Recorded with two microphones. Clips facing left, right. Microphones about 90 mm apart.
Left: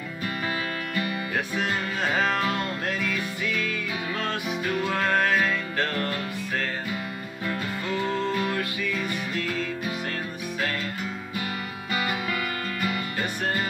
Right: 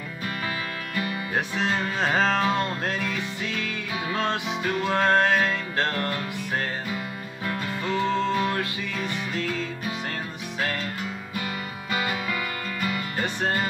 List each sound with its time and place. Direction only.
1.3 s music: 25° right (ahead or behind)
11.9 s music: centre (ahead or behind)